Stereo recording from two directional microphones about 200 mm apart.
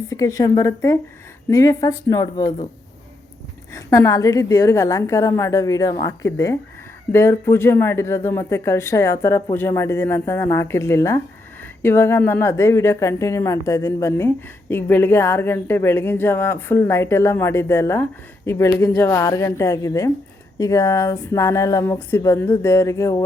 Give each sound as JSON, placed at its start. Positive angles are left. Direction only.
{"t": 0.1, "sound": "a woman's voice", "side_deg": 15}
{"t": 3.7, "sound": "a woman's voice", "side_deg": 15}